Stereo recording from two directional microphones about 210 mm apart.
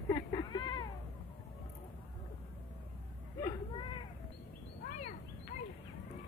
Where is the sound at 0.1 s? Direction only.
20° left (ahead or behind).